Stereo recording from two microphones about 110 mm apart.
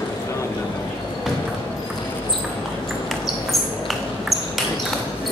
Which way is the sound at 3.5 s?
Centre (ahead or behind).